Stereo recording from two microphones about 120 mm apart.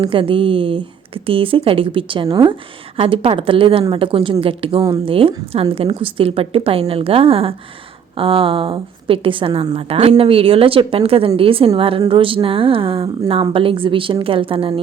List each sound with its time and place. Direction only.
0.1 s speech: 50° right (ahead or behind)
9.7 s speech: 60° right (ahead or behind)